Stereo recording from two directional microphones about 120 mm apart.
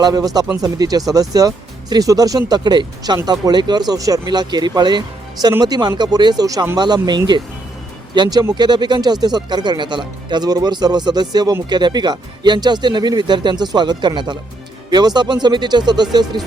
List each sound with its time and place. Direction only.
0.0 s speech: 30° right (ahead or behind)